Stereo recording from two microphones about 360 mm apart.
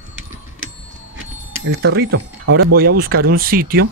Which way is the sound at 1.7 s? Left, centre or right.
Right.